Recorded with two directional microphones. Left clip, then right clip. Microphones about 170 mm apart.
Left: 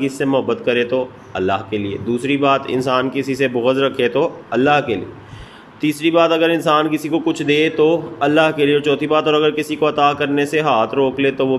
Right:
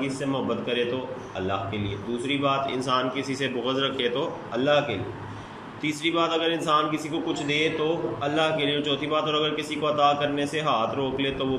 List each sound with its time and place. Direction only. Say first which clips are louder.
0.0 s a man's voice: left 10 dB; 50° left (ahead or behind)